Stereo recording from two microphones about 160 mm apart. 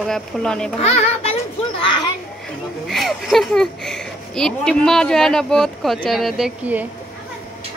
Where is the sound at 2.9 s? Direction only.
Centre (ahead or behind).